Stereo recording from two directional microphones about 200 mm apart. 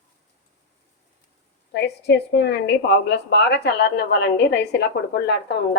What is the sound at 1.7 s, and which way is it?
A woman's voice, 55° left (ahead or behind).